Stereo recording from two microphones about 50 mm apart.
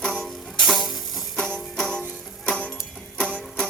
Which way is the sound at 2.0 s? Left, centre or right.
Left.